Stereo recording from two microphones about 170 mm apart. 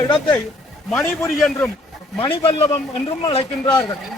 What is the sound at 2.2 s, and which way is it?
Speech, 30° left (ahead or behind).